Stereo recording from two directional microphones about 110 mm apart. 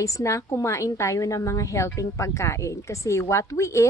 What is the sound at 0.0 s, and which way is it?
A woman's voice, 30° left (ahead or behind).